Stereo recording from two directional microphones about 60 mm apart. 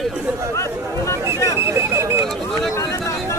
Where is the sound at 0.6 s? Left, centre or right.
Left.